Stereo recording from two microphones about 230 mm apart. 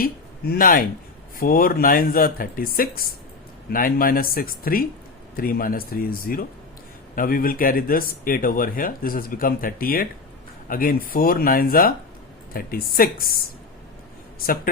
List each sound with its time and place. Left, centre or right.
0.0 s speech: left
14.4 s speech: left